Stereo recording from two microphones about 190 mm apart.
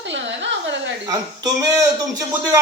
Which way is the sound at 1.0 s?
20° right (ahead or behind).